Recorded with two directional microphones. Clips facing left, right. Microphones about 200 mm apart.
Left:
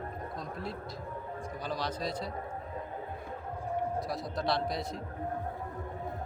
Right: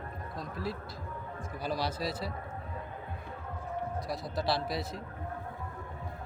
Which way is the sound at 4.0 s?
Centre (ahead or behind).